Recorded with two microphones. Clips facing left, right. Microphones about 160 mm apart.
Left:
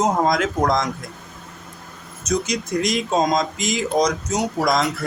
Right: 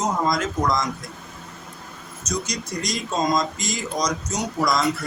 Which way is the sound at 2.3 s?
55° left (ahead or behind).